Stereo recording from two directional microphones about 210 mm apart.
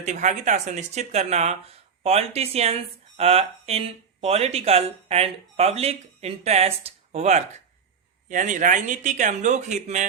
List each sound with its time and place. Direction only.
0.0 s speech: 35° right (ahead or behind)